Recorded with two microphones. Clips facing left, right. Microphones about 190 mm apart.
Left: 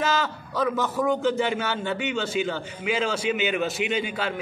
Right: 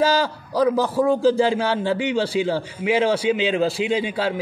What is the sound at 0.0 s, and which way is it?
A man's voice, 30° right (ahead or behind).